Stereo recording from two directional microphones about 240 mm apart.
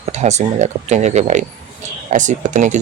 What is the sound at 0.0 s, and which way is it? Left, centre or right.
Speech, right.